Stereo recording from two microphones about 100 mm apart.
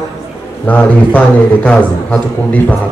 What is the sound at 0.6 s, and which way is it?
Speech, 15° left (ahead or behind).